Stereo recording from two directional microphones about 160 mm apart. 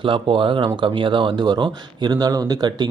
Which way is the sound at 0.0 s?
30° right (ahead or behind).